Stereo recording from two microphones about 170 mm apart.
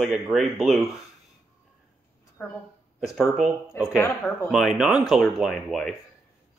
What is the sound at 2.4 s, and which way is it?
Speech, 10° left (ahead or behind).